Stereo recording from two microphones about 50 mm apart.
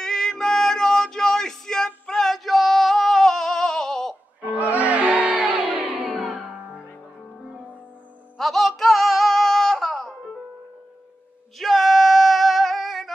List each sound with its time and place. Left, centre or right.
0.0 s male singing: centre
2.0 s a sound: centre
4.5 s music: right
8.4 s music: centre
11.5 s female singing: centre